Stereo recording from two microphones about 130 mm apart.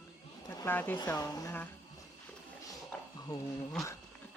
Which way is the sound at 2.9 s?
10° left (ahead or behind).